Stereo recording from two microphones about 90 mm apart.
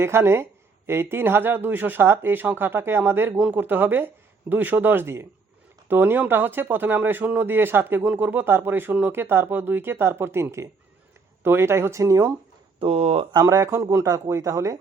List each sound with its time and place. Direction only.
0.0 s speech: 30° right (ahead or behind)
12.8 s speech: 90° right
13.3 s speech: 40° right (ahead or behind)